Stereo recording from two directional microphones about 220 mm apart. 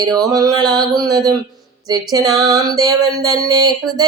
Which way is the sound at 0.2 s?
15° right (ahead or behind).